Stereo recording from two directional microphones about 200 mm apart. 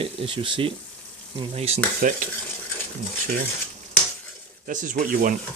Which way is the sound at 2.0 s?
45° right (ahead or behind).